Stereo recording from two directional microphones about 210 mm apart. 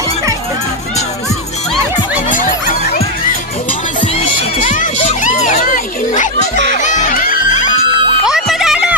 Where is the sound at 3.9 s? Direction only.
25° left (ahead or behind).